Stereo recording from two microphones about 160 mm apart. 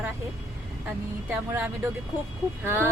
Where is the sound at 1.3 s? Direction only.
10° right (ahead or behind).